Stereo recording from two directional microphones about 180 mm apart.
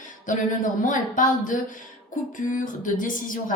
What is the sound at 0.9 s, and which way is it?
A woman's voice, 45° left (ahead or behind).